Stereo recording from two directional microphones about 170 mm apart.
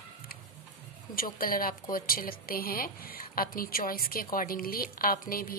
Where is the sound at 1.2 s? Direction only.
55° left (ahead or behind).